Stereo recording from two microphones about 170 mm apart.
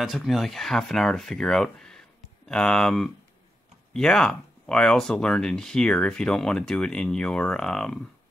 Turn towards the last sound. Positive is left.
turn(degrees=5)  # may be behind; listen again after turning